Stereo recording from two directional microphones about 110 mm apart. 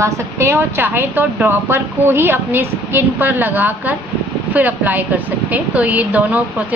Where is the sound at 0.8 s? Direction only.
15° right (ahead or behind).